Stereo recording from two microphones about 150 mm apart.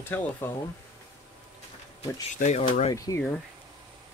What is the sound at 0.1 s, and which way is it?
Speech, 15° left (ahead or behind).